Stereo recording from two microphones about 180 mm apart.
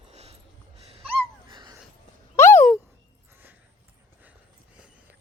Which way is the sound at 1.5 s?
25° right (ahead or behind).